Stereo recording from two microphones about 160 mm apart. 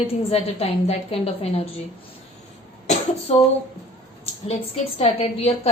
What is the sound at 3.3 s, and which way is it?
Speech, 40° left (ahead or behind).